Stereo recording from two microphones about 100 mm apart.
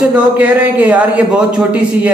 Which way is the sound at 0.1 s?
15° right (ahead or behind).